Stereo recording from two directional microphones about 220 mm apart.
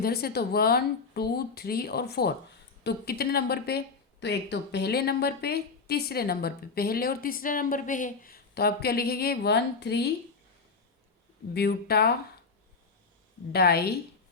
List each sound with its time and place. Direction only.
0.0 s speech: 45° left (ahead or behind)
11.5 s speech: 45° left (ahead or behind)
13.5 s speech: 45° left (ahead or behind)